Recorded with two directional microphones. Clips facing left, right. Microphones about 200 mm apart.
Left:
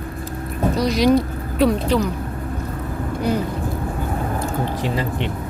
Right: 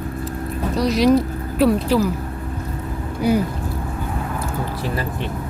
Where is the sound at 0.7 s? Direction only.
Centre (ahead or behind).